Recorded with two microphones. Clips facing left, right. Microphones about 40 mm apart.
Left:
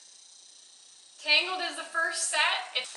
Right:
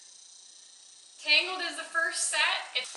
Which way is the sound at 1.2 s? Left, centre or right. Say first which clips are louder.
Even; centre.